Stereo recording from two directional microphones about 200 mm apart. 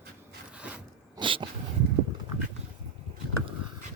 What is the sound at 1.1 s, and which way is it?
Dog, 25° right (ahead or behind).